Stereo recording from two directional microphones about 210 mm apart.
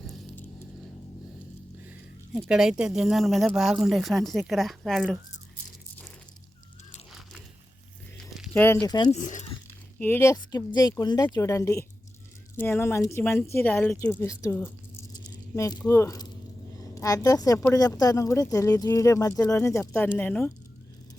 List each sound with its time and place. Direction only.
1.9 s speech: 5° right (ahead or behind)
8.2 s speech: 5° left (ahead or behind)
9.1 s speech: 35° left (ahead or behind)
10.0 s speech: 10° left (ahead or behind)
15.1 s rattle: 15° left (ahead or behind)
15.9 s speech: 15° left (ahead or behind)